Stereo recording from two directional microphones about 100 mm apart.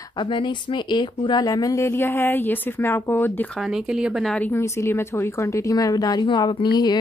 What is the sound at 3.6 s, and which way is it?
Speech, 5° right (ahead or behind).